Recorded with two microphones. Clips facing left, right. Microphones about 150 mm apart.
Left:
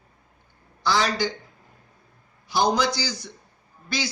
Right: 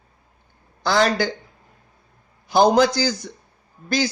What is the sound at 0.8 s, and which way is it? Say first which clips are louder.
Speech: right 4 dB; 55° right (ahead or behind).